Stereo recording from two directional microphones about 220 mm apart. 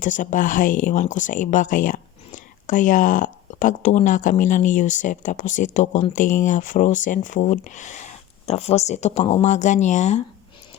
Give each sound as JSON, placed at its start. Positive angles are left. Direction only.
{"t": 0.0, "sound": "speech", "side_deg": 35}